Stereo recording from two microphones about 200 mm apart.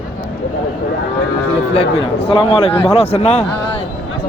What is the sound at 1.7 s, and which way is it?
A man's voice, 30° left (ahead or behind).